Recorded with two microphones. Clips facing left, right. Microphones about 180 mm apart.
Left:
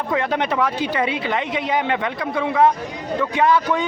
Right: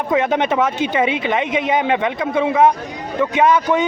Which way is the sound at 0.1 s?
20° right (ahead or behind).